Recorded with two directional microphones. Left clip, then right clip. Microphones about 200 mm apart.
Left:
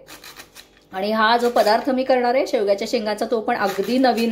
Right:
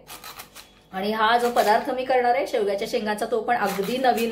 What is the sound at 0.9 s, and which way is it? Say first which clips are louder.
Speech: left 3 dB; 35° left (ahead or behind).